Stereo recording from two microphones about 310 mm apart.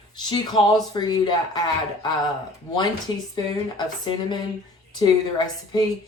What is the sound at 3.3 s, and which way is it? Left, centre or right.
Speech, centre.